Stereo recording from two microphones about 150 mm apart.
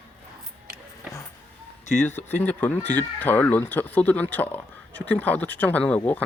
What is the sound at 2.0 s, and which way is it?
Speech, 15° left (ahead or behind).